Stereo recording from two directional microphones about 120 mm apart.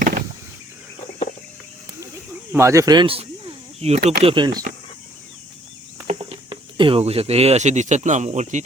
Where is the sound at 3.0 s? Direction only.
50° right (ahead or behind).